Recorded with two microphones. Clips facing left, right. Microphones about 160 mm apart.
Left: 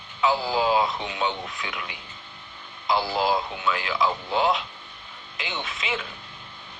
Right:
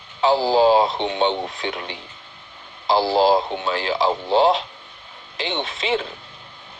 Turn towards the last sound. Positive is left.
turn(degrees=-35)  # may be behind; listen again after turning